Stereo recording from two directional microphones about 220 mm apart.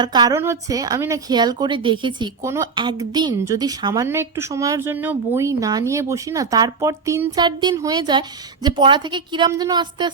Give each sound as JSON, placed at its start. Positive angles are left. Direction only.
{"t": 0.0, "sound": "a woman's voice", "side_deg": -20}